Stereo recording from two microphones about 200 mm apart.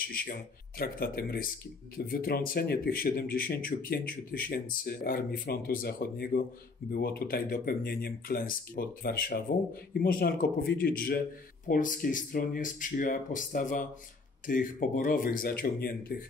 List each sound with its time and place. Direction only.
0.1 s speech: 45° left (ahead or behind)